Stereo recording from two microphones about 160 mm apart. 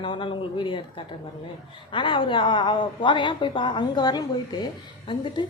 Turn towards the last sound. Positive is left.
turn(degrees=30)  # may be behind; listen again after turning